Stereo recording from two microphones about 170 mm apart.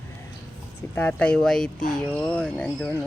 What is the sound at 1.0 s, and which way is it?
Speech, 10° left (ahead or behind).